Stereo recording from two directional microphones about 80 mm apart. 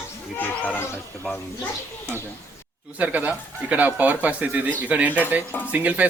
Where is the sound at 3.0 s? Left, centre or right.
Centre.